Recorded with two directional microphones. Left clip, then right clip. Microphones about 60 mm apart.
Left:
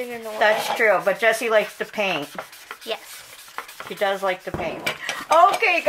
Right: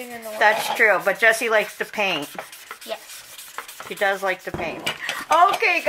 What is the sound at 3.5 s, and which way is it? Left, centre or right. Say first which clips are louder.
Stir: even; right.